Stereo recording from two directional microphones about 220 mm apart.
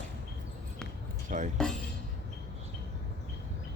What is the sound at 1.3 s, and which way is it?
Music, 35° right (ahead or behind).